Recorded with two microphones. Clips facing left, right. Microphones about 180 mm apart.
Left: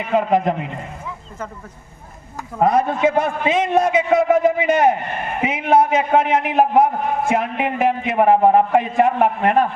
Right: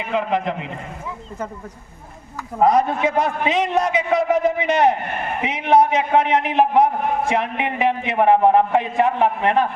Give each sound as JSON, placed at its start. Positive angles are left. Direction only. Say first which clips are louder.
{"t": 0.1, "sound": "a man's voice", "louder": "left 5 dB", "side_deg": 45}
{"t": 2.6, "sound": "a man's voice", "louder": "even", "side_deg": 55}